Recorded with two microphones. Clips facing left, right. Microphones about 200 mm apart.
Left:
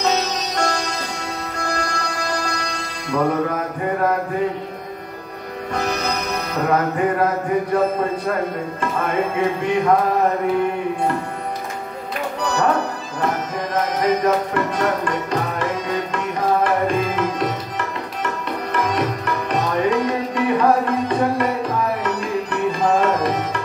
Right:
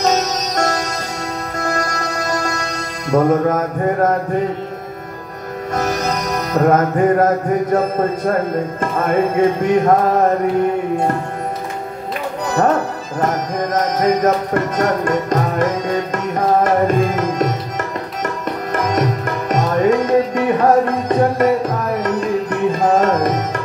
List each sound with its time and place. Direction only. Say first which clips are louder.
0.0 s music: right 4 dB; 45° right (ahead or behind)
5.8 s music: right 3 dB; 45° right (ahead or behind)
8.9 s speech: right 6 dB; 40° right (ahead or behind)
13.2 s music: right 4 dB; 45° right (ahead or behind)